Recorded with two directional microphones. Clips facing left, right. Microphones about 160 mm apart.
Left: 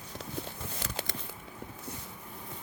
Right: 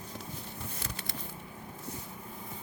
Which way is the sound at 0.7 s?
90° left.